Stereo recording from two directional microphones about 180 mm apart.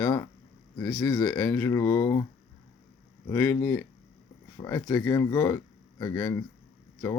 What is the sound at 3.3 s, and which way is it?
Speech, 15° left (ahead or behind).